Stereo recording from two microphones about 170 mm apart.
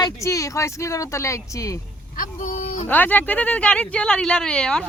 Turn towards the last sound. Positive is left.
turn(degrees=5)  # may be behind; listen again after turning